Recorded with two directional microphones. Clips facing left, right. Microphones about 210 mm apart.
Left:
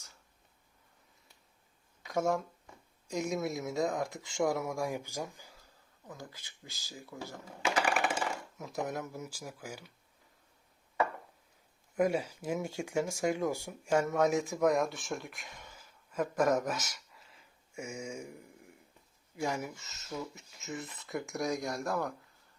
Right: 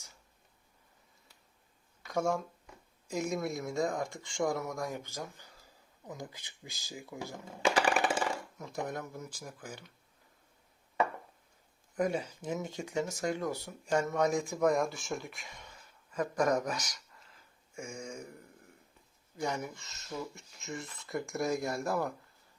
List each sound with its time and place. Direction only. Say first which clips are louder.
2.0 s speech: left 1 dB; centre (ahead or behind)
6.1 s speech: right 3 dB; 15° right (ahead or behind)
7.6 s a sound: right 2 dB; 30° right (ahead or behind)
8.5 s speech: left 1 dB; centre (ahead or behind)
11.9 s speech: left 2 dB; 10° left (ahead or behind)